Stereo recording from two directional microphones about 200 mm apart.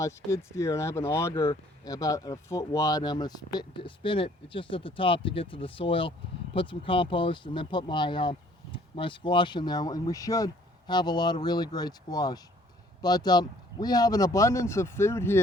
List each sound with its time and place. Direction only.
0.0 s a man's voice: 15° left (ahead or behind)